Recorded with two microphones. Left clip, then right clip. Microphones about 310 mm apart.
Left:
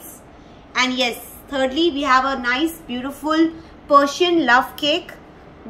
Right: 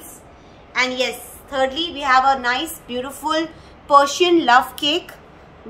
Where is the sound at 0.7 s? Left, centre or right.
Centre.